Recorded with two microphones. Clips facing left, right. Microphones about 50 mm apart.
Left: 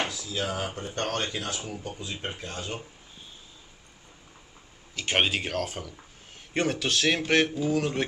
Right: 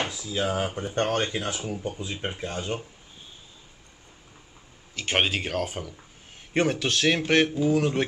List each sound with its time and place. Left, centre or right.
0.1 s speech: centre
4.9 s speech: centre